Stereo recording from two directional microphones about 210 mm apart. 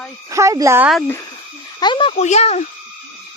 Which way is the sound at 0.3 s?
15° right (ahead or behind).